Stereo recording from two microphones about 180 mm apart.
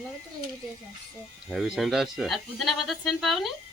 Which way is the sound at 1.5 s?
Centre (ahead or behind).